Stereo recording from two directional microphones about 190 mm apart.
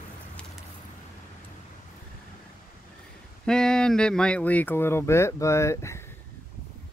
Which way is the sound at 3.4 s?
5° left (ahead or behind).